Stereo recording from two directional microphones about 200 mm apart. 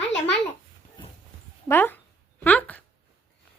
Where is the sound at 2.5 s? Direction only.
5° left (ahead or behind).